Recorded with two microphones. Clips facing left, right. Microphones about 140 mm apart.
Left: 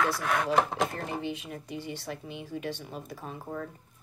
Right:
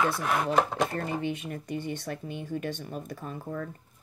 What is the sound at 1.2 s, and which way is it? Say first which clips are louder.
Speech: right 3 dB; 55° right (ahead or behind).